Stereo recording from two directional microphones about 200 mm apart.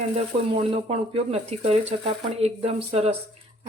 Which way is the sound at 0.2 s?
30° right (ahead or behind).